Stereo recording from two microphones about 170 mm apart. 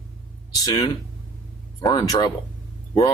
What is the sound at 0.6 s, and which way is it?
Speech, 20° left (ahead or behind).